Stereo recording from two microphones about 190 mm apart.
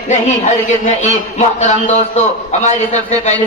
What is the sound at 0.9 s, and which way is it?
A man's voice, 40° left (ahead or behind).